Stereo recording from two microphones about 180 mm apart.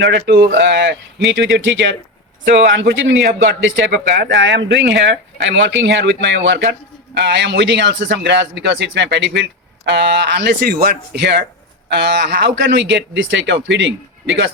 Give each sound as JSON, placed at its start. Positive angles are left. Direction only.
{"t": 0.0, "sound": "a man's voice", "side_deg": -70}
{"t": 7.1, "sound": "a man's voice", "side_deg": -70}